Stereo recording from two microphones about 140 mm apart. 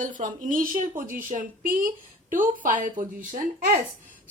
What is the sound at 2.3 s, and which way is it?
Speech, 70° right (ahead or behind).